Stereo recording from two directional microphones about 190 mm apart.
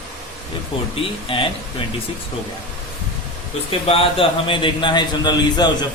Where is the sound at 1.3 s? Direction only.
30° left (ahead or behind).